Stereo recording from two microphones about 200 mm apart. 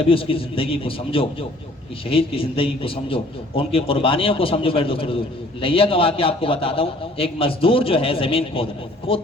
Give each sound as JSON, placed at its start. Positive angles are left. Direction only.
{"t": 0.0, "sound": "a man's voice", "side_deg": 25}